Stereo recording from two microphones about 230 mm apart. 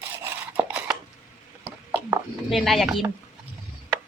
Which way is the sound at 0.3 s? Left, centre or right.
Centre.